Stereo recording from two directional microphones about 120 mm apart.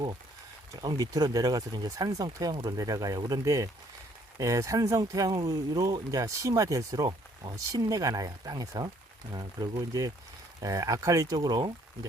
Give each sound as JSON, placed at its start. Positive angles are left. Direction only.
{"t": 0.8, "sound": "speech", "side_deg": -35}